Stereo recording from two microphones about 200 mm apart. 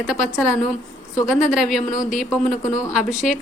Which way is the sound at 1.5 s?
Centre (ahead or behind).